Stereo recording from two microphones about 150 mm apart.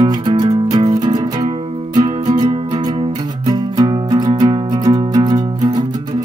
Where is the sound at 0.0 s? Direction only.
30° right (ahead or behind).